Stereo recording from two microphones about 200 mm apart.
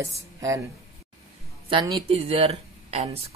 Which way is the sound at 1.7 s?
25° right (ahead or behind).